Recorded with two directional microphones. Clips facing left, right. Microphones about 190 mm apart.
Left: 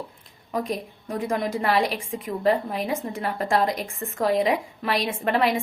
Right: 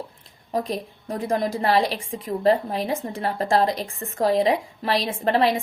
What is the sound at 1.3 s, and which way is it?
A woman's voice, 35° right (ahead or behind).